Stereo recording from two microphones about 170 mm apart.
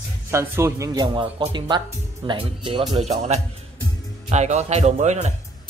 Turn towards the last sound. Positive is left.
turn(degrees=-45)  # may be behind; listen again after turning